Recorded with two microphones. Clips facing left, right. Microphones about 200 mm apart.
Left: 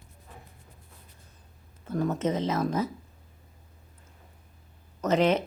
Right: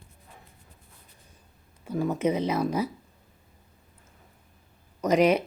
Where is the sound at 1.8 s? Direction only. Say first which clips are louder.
Right 2 dB; 10° right (ahead or behind).